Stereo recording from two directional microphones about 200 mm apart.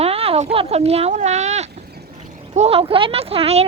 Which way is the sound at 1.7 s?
55° right (ahead or behind).